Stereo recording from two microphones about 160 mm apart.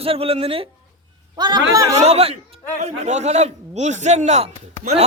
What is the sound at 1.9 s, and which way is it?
A man's voice, 40° right (ahead or behind).